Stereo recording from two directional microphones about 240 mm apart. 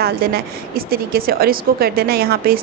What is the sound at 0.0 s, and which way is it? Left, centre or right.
A woman's voice, right.